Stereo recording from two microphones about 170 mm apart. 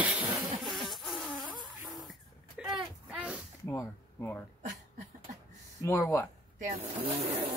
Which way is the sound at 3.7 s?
15° left (ahead or behind).